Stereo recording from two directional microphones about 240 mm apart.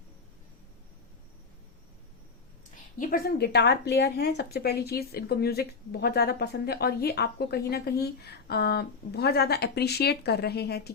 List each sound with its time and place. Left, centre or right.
3.0 s speech: left